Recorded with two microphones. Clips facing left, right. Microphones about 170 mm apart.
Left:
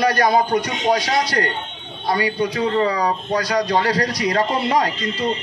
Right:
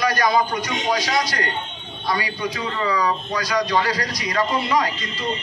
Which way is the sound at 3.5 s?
60° left (ahead or behind).